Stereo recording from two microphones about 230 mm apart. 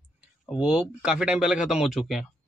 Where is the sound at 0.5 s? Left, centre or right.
Centre.